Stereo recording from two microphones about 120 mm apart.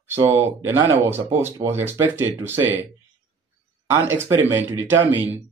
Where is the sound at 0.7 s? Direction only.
35° right (ahead or behind).